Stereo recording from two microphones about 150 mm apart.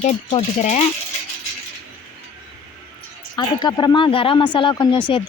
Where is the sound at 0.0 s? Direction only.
45° left (ahead or behind).